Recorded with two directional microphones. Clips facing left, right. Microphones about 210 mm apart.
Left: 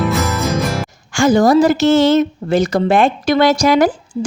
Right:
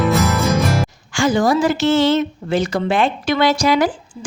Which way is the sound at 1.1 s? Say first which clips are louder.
Left 5 dB; 45° left (ahead or behind).